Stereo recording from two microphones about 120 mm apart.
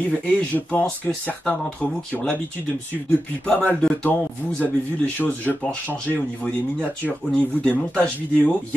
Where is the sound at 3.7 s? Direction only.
10° left (ahead or behind).